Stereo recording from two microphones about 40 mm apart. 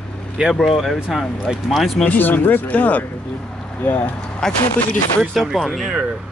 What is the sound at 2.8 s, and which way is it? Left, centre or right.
Speech, left.